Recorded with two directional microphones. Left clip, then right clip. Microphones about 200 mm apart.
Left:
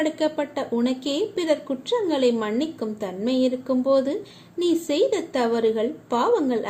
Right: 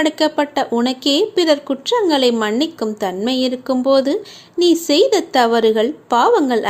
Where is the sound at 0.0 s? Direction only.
20° right (ahead or behind).